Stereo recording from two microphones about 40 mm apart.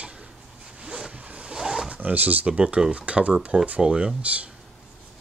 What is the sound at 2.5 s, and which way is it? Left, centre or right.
Speech, right.